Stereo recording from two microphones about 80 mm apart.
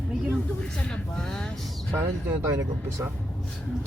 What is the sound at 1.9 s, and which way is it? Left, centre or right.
Speech, right.